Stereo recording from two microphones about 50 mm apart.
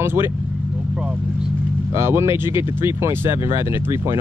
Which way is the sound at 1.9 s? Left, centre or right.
Right.